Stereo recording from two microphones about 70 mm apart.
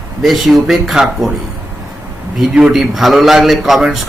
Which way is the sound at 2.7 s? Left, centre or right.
Centre.